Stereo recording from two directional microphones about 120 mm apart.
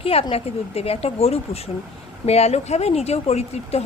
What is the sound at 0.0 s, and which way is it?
A woman's voice, 55° left (ahead or behind).